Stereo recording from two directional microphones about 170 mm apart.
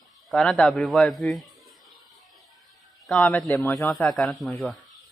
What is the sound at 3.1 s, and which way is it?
Speech, 10° left (ahead or behind).